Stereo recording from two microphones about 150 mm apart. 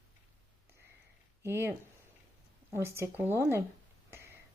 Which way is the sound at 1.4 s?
15° right (ahead or behind).